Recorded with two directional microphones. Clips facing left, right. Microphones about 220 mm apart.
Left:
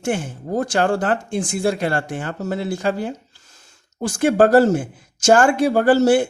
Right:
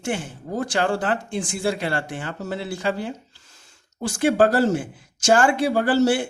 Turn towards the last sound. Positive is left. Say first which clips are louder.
# left 5 dB
turn(degrees=45)  # may be behind; listen again after turning